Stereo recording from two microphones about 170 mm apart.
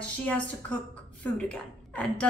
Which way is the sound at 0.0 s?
10° left (ahead or behind).